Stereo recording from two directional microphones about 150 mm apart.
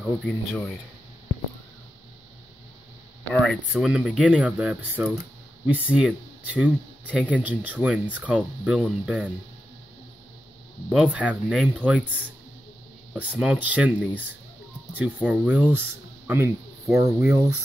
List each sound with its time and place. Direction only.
0.0 s speech: centre (ahead or behind)
3.3 s speech: 5° left (ahead or behind)
3.8 s speech: 10° right (ahead or behind)
10.9 s speech: 10° right (ahead or behind)
13.4 s speech: 10° right (ahead or behind)